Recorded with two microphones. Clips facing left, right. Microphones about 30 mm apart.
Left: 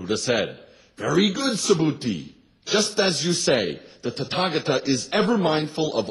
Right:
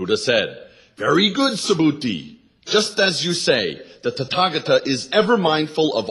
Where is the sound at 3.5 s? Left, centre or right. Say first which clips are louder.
Right 2 dB; right.